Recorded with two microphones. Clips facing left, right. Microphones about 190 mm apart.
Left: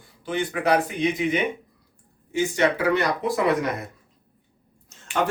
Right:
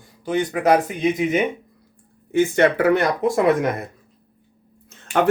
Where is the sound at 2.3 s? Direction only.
55° right (ahead or behind).